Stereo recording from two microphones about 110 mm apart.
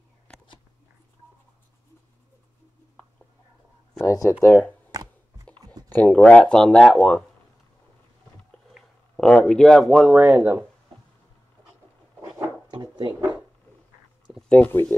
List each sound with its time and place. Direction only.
0.3 s a sound: 10° left (ahead or behind)
4.0 s speech: 25° left (ahead or behind)
5.9 s speech: 15° left (ahead or behind)
8.7 s speech: 5° left (ahead or behind)
10.1 s speech: 15° right (ahead or behind)
12.7 s drawer open or close: 45° right (ahead or behind)
14.5 s speech: 15° left (ahead or behind)